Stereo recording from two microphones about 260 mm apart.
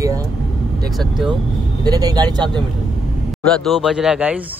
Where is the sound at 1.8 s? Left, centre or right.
Centre.